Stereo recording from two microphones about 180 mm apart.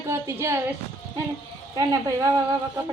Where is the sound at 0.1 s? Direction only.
15° right (ahead or behind).